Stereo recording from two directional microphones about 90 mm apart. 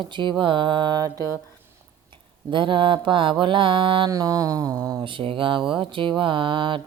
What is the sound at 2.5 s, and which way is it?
Music, 65° right (ahead or behind).